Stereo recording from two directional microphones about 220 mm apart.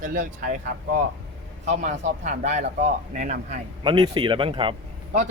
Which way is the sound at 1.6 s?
30° right (ahead or behind).